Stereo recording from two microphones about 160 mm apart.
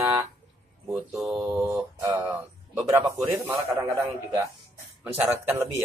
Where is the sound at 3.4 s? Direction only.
15° right (ahead or behind).